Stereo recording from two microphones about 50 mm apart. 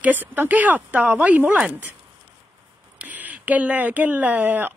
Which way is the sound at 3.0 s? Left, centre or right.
Right.